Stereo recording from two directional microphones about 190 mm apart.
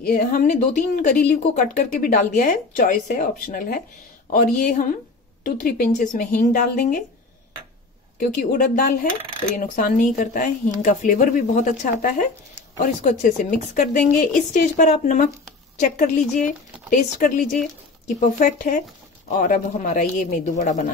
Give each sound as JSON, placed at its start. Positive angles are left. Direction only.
{"t": 0.0, "sound": "speech", "side_deg": 50}
{"t": 8.5, "sound": "speech", "side_deg": 50}
{"t": 16.3, "sound": "speech", "side_deg": 45}